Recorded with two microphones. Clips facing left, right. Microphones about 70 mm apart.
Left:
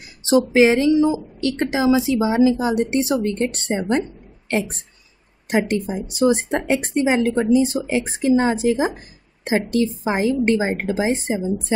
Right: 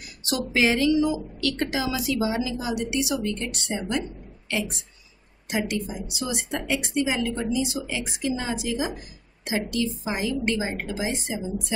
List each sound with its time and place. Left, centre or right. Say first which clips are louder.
0.2 s a woman's voice: left 9 dB; left